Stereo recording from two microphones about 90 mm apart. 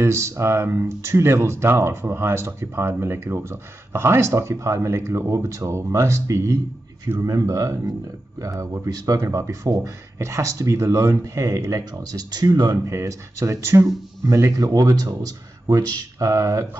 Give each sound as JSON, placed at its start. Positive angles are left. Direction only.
{"t": 0.0, "sound": "speech", "side_deg": -30}